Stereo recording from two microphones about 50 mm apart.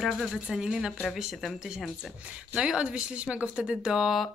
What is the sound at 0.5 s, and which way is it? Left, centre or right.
Speech, centre.